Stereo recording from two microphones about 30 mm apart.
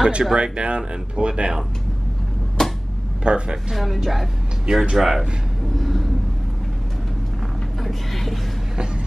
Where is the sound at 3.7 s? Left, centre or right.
Centre.